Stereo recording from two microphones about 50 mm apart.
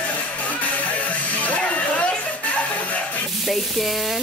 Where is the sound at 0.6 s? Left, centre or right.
Left.